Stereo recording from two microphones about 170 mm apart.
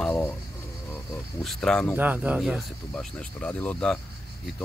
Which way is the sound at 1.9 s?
10° right (ahead or behind).